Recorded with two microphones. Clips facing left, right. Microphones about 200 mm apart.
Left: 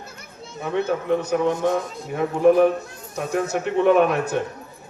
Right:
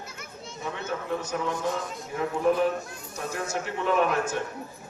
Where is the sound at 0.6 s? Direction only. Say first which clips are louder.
Left 10 dB; 60° left (ahead or behind).